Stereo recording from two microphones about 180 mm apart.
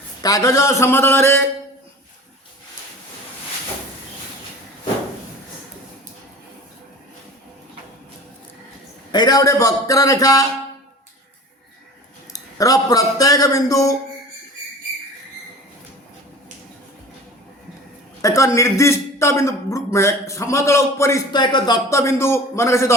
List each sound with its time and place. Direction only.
0.2 s speech: 20° left (ahead or behind)
9.1 s a man's voice: 20° left (ahead or behind)
12.3 s a man's voice: 20° left (ahead or behind)
18.2 s speech: 15° left (ahead or behind)